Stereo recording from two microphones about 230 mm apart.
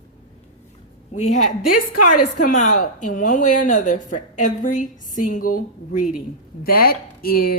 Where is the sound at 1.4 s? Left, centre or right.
Left.